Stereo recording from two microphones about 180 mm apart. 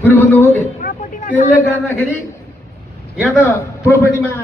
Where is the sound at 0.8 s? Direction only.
45° left (ahead or behind).